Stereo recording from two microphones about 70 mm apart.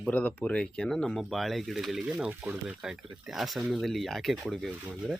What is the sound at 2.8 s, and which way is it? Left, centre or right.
Speech, centre.